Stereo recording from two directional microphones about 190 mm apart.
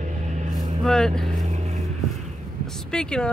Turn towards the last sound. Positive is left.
turn(degrees=5)  # may be behind; listen again after turning